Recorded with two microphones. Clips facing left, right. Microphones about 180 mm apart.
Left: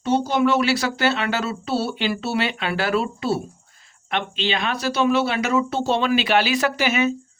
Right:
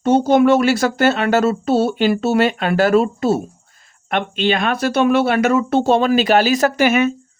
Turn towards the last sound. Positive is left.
turn(degrees=-55)  # may be behind; listen again after turning